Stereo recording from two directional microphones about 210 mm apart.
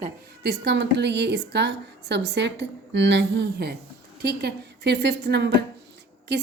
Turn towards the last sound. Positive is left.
turn(degrees=-55)  # may be behind; listen again after turning